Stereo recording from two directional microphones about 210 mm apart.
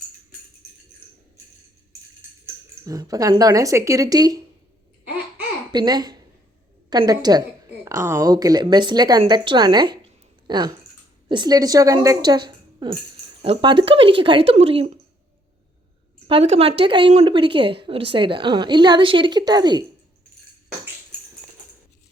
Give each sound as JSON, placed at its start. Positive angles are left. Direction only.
{"t": 2.8, "sound": "a woman's voice", "side_deg": -15}
{"t": 5.7, "sound": "a woman's voice", "side_deg": -20}
{"t": 16.2, "sound": "a woman's voice", "side_deg": -30}